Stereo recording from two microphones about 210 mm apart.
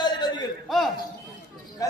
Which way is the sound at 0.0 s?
20° left (ahead or behind).